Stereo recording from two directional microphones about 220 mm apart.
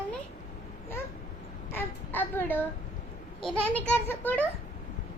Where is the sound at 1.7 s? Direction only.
10° left (ahead or behind).